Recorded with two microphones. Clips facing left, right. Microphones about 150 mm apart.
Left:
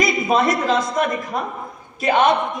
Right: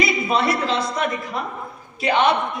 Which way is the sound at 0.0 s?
45° left (ahead or behind).